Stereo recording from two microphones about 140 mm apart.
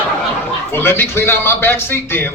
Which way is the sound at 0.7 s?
15° left (ahead or behind).